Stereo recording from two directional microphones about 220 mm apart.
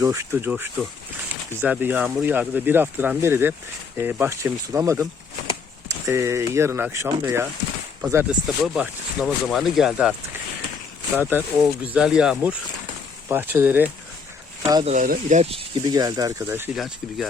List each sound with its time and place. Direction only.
0.0 s speech: 15° right (ahead or behind)
6.1 s speech: 15° right (ahead or behind)
11.2 s speech: 10° right (ahead or behind)
14.6 s speech: 20° right (ahead or behind)
14.9 s speech: 35° right (ahead or behind); by 16.6 s 15° right (ahead or behind)
16.7 s speech: centre (ahead or behind)